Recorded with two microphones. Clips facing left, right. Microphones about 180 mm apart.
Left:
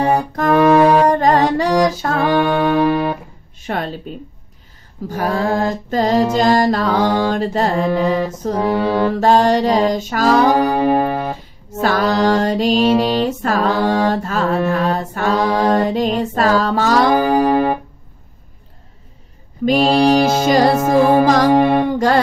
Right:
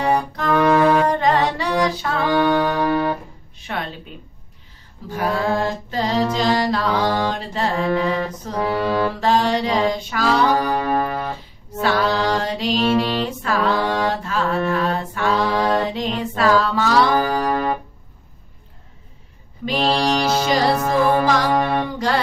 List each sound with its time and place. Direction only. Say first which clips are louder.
0.0 s mantra: left 4 dB; 45° left (ahead or behind)
0.8 s music: left 4 dB; 40° left (ahead or behind)
2.2 s music: left 2 dB; 15° left (ahead or behind)
3.6 s speech: left 5 dB; 45° left (ahead or behind)
5.0 s mantra: left 3 dB; 45° left (ahead or behind)
8.5 s mantra: left 3 dB; 25° left (ahead or behind)
9.2 s mantra: left 8 dB; 45° left (ahead or behind)
10.5 s music: left 5 dB; 25° left (ahead or behind)
11.8 s mantra: left 4 dB; 40° left (ahead or behind)
17.1 s music: left 6 dB; 25° left (ahead or behind)
19.6 s mantra: left 6 dB; 45° left (ahead or behind)
20.1 s music: left 6 dB; 45° left (ahead or behind)
21.5 s music: left 7 dB; 20° left (ahead or behind)
21.8 s music: left 7 dB; 50° left (ahead or behind)